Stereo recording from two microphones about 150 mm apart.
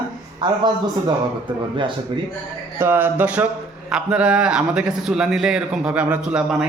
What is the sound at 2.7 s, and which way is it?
A man's voice, 15° right (ahead or behind).